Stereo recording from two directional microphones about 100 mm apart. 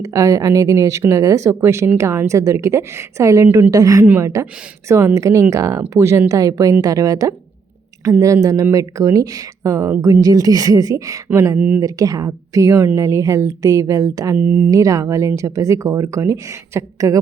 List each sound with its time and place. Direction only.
0.0 s speech: 35° right (ahead or behind)
11.3 s speech: 20° right (ahead or behind)
11.8 s speech: 35° right (ahead or behind)
14.3 s speech: 20° right (ahead or behind)
14.7 s speech: 35° right (ahead or behind)